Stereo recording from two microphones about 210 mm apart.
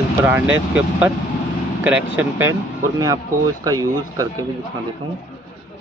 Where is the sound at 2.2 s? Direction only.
10° right (ahead or behind).